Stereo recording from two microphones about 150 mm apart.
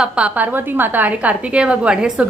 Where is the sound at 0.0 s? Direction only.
5° right (ahead or behind).